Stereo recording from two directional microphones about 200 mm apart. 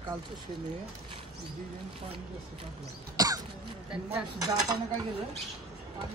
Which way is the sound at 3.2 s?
20° right (ahead or behind).